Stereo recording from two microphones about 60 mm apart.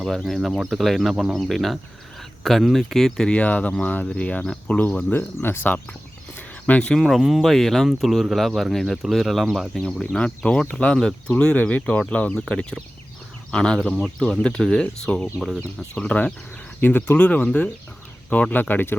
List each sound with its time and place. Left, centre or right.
0.0 s speech: centre
3.2 s speech: left
5.1 s speech: left
6.3 s a sound: left
7.0 s speech: centre; by 12.3 s left
13.5 s speech: centre
16.8 s speech: left
18.5 s speech: left